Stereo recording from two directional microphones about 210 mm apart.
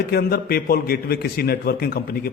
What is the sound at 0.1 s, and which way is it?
A man's voice, 45° left (ahead or behind).